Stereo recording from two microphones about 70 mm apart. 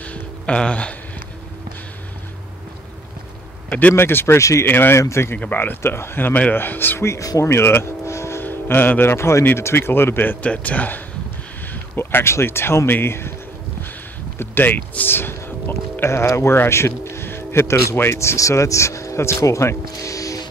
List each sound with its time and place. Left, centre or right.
0.1 s a sound: centre
3.9 s speech: left
4.4 s speech: left
4.6 s speech: left
5.4 s speech: left
7.0 s speech: left
7.2 s music: left
8.5 s speech: left
10.4 s speech: centre; by 13.3 s left
14.4 s speech: left